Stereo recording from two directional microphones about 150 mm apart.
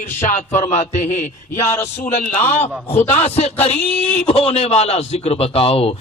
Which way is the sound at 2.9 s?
45° left (ahead or behind).